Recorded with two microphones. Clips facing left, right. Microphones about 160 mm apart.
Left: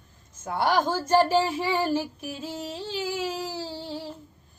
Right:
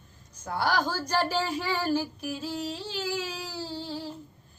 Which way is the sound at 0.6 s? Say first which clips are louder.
Left 4 dB; 20° left (ahead or behind).